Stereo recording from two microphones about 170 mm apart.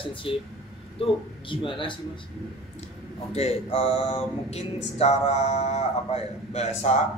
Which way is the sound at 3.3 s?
40° left (ahead or behind).